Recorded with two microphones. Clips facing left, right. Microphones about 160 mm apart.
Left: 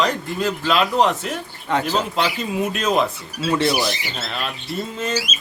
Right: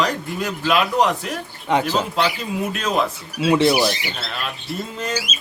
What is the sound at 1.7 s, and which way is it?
Speech, 15° right (ahead or behind).